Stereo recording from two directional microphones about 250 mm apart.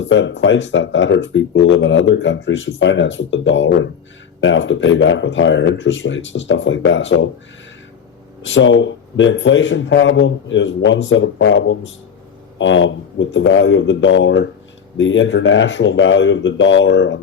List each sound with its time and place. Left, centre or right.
0.0 s speech: left
8.4 s speech: left